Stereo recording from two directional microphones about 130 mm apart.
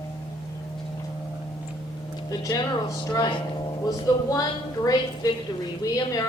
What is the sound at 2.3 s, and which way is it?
A man's voice, 30° left (ahead or behind).